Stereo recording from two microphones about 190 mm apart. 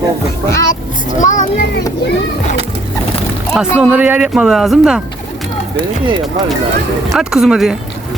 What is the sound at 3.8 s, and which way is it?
Speech, 5° right (ahead or behind).